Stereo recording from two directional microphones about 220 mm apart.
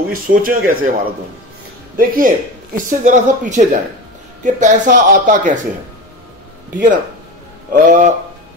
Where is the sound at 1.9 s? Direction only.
40° right (ahead or behind).